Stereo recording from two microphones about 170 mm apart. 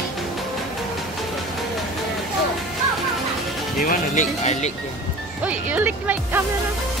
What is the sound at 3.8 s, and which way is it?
Speech, 50° left (ahead or behind).